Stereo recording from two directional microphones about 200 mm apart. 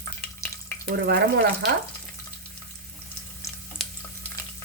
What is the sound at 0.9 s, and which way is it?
Speech, 50° right (ahead or behind).